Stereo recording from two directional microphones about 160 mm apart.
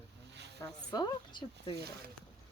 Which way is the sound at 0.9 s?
25° left (ahead or behind).